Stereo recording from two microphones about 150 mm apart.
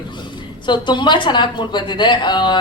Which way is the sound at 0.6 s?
30° left (ahead or behind).